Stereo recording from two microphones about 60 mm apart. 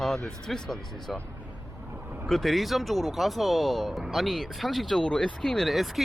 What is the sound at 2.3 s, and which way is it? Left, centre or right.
Speech, centre.